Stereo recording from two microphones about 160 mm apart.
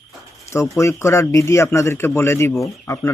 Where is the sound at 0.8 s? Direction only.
20° left (ahead or behind).